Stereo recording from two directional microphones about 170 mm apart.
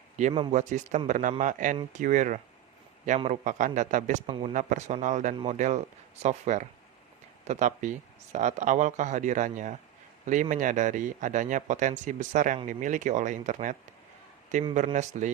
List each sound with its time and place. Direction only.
0.2 s speech: 45° right (ahead or behind)
4.3 s speech: 30° right (ahead or behind)
4.5 s speech: 45° right (ahead or behind)